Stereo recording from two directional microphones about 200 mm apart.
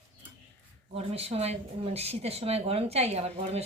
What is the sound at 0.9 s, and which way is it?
Speech, 30° right (ahead or behind).